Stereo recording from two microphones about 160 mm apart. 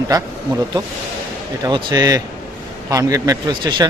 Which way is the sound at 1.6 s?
25° right (ahead or behind).